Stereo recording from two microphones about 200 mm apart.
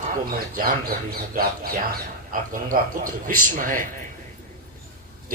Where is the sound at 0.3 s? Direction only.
45° right (ahead or behind).